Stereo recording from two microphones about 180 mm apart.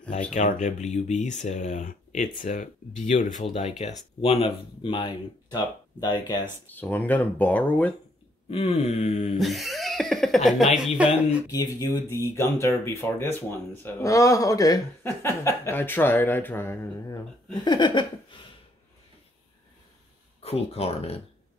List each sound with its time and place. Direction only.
0.3 s speech: 40° left (ahead or behind); by 6.1 s 25° left (ahead or behind)
6.7 s a man's voice: 10° left (ahead or behind)
8.5 s speech: 35° left (ahead or behind)
9.4 s speech: centre (ahead or behind)
11.5 s a man's voice: 20° left (ahead or behind)
17.6 s a sound: 25° left (ahead or behind)
20.3 s speech: 35° left (ahead or behind)